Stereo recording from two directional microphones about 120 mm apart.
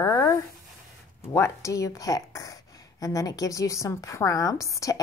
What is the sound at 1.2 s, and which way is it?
A woman's voice, 25° left (ahead or behind).